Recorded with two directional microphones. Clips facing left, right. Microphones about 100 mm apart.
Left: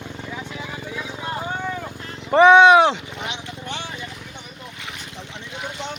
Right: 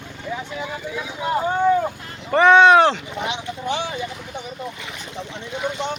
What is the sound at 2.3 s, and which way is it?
Speech, 15° left (ahead or behind).